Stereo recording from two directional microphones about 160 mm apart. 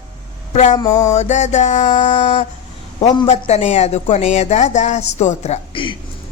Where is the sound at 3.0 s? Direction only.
40° left (ahead or behind).